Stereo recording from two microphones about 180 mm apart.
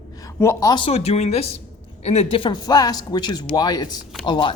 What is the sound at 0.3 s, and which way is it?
Speech, 20° left (ahead or behind).